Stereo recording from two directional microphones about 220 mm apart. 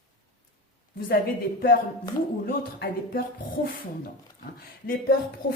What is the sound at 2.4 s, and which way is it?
Speech, 40° left (ahead or behind).